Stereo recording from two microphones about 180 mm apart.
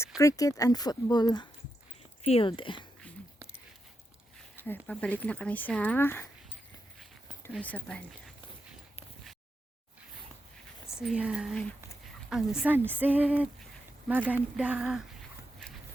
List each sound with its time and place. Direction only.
0.2 s speech: 20° left (ahead or behind)
4.9 s speech: 5° left (ahead or behind)
7.5 s speech: 5° left (ahead or behind)
10.8 s speech: 5° right (ahead or behind)